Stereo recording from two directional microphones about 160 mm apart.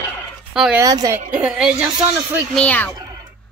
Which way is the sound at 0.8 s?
20° right (ahead or behind).